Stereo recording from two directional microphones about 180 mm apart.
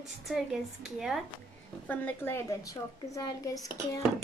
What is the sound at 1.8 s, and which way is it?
A woman's voice, 10° left (ahead or behind).